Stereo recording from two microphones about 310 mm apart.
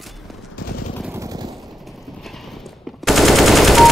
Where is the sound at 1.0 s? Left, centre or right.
Centre.